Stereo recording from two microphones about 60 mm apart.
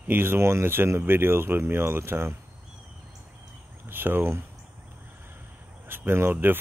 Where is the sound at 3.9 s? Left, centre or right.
Right.